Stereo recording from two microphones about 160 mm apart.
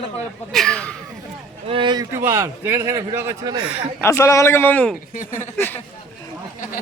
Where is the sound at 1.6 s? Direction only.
30° right (ahead or behind).